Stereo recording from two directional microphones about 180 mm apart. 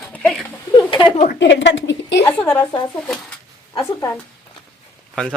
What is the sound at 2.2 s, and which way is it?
A woman's voice, 5° left (ahead or behind).